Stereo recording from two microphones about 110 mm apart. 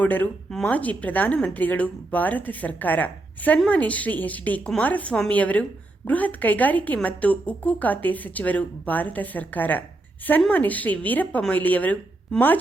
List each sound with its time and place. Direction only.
0.0 s a woman's voice: 15° left (ahead or behind)